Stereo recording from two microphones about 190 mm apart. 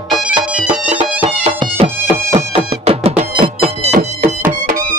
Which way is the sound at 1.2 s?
30° right (ahead or behind).